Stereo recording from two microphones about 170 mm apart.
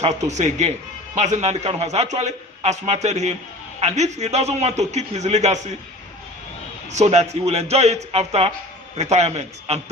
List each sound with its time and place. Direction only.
0.0 s a man's voice: 40° right (ahead or behind)
6.8 s a man's voice: 40° right (ahead or behind)